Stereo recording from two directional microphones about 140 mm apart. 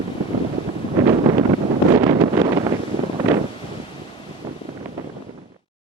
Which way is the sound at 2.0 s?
30° right (ahead or behind).